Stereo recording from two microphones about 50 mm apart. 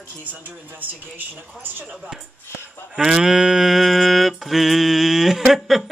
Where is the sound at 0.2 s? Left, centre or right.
Right.